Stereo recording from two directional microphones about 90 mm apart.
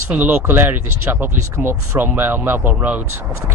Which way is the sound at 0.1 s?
20° right (ahead or behind).